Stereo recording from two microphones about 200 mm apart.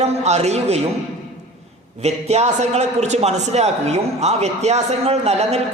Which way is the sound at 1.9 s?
35° right (ahead or behind).